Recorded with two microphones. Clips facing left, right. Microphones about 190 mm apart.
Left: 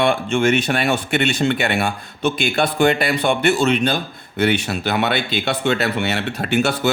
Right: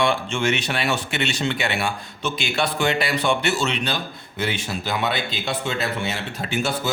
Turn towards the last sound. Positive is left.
turn(degrees=70)  # may be behind; listen again after turning